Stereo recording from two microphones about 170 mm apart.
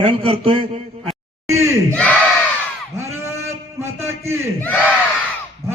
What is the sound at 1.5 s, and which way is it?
Speech, 15° right (ahead or behind).